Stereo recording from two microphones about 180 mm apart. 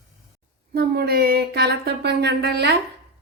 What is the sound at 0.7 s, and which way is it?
Speech, 60° right (ahead or behind).